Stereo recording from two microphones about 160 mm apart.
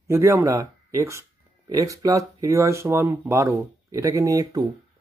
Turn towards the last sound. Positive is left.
turn(degrees=-20)  # may be behind; listen again after turning